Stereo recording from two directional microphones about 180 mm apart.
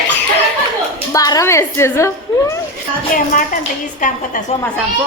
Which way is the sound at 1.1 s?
20° left (ahead or behind).